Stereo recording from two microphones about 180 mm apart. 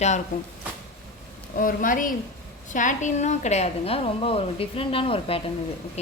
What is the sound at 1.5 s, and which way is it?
A woman's voice, 50° left (ahead or behind).